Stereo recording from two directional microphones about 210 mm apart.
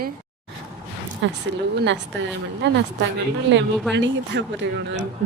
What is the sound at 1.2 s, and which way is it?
Speech, 55° right (ahead or behind).